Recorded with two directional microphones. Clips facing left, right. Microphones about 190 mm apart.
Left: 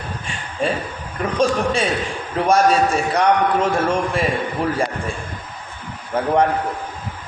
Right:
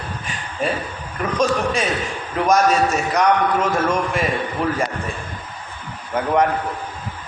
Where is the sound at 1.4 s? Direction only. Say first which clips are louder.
Left 1 dB; 30° left (ahead or behind).